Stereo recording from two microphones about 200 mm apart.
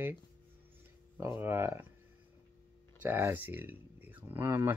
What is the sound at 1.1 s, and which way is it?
Speech, 10° right (ahead or behind).